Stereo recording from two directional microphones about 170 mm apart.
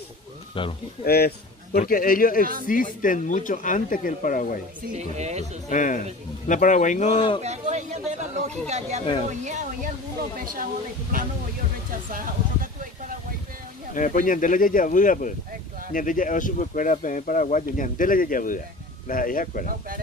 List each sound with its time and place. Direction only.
0.6 s speech: 30° left (ahead or behind)
1.0 s a man's voice: 65° left (ahead or behind)
4.9 s speech: 40° right (ahead or behind)
5.7 s speech: 50° left (ahead or behind); by 7.4 s 30° left (ahead or behind)
7.4 s speech: 40° right (ahead or behind)
13.9 s speech: 50° left (ahead or behind)